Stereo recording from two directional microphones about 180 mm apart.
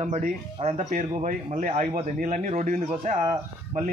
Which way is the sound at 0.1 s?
40° right (ahead or behind).